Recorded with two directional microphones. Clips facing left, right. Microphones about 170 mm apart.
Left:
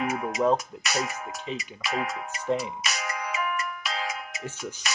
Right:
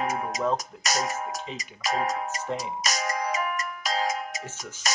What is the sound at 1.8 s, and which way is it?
Music, 40° right (ahead or behind).